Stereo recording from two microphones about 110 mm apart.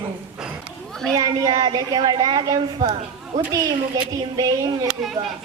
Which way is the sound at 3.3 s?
30° right (ahead or behind).